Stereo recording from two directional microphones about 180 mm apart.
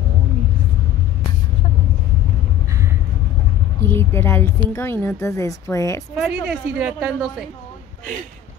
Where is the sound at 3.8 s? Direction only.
15° left (ahead or behind).